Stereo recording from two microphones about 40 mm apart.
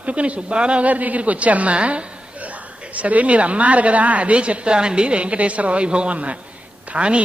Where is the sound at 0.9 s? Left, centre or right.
Right.